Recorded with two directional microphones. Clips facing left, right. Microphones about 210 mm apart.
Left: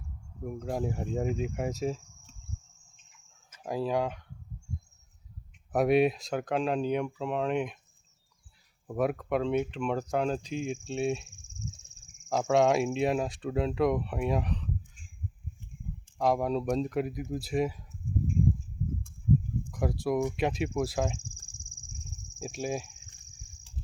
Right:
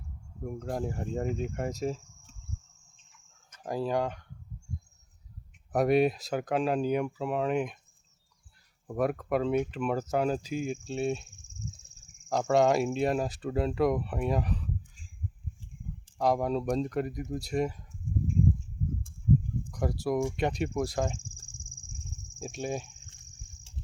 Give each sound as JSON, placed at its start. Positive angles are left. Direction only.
{"t": 0.4, "sound": "speech", "side_deg": 5}
{"t": 3.6, "sound": "speech", "side_deg": 0}
{"t": 5.7, "sound": "speech", "side_deg": 0}
{"t": 8.9, "sound": "speech", "side_deg": 0}
{"t": 12.3, "sound": "speech", "side_deg": 0}
{"t": 16.1, "sound": "speech", "side_deg": 0}
{"t": 19.7, "sound": "speech", "side_deg": 0}
{"t": 22.4, "sound": "speech", "side_deg": 5}
{"t": 23.7, "sound": "a sound", "side_deg": -25}